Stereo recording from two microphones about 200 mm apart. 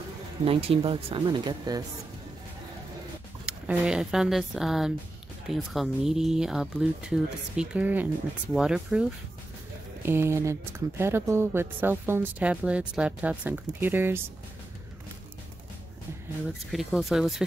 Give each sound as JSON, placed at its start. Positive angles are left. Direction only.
{"t": 0.5, "sound": "speech", "side_deg": -30}
{"t": 3.4, "sound": "speech", "side_deg": -5}
{"t": 10.0, "sound": "speech", "side_deg": -10}
{"t": 16.7, "sound": "speech", "side_deg": 0}